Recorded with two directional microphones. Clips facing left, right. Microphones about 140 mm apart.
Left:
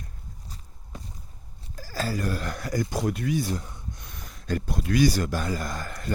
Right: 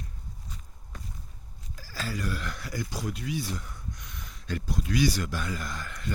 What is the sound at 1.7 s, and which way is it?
Speech, 45° left (ahead or behind).